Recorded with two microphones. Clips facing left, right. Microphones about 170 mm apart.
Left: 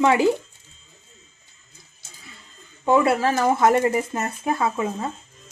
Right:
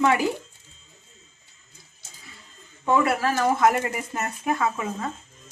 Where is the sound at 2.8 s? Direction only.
30° left (ahead or behind).